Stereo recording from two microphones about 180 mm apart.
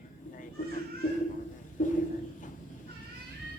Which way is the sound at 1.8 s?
50° left (ahead or behind).